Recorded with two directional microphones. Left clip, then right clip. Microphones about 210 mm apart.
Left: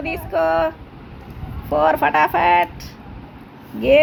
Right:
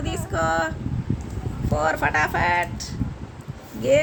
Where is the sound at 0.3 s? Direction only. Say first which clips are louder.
Left 5 dB; centre (ahead or behind).